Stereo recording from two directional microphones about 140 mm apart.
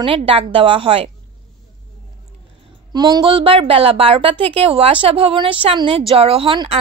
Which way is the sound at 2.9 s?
30° right (ahead or behind).